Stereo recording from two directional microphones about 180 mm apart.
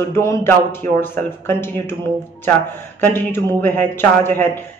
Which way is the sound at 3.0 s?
10° left (ahead or behind).